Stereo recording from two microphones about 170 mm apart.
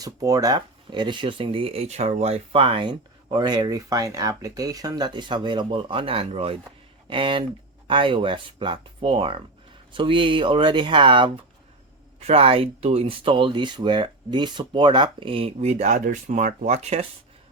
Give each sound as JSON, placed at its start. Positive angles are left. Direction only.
{"t": 0.0, "sound": "speech", "side_deg": -20}